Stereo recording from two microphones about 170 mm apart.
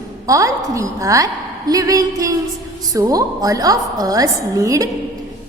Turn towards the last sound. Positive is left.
turn(degrees=-20)  # may be behind; listen again after turning